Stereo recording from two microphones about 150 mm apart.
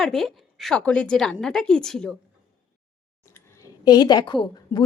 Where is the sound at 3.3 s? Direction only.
20° left (ahead or behind).